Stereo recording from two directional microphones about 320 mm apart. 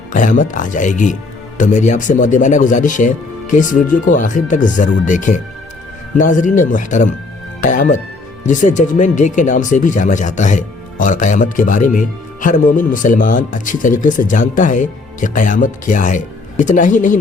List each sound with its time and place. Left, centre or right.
0.1 s speech: left